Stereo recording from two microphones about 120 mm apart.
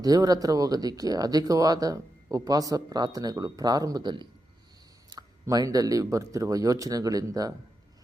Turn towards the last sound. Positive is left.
turn(degrees=-30)  # may be behind; listen again after turning